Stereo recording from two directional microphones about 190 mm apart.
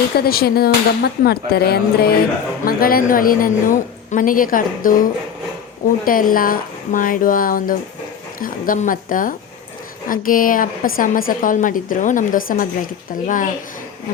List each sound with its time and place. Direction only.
0.2 s a woman's voice: 55° left (ahead or behind)
6.1 s a woman's voice: 45° left (ahead or behind)